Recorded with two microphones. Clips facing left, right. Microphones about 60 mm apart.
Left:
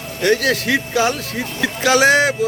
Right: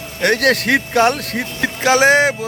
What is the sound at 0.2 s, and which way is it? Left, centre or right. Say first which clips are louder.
A man's voice: right 2 dB; right.